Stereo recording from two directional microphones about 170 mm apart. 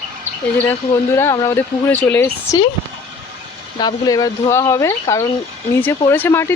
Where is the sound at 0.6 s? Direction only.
15° left (ahead or behind).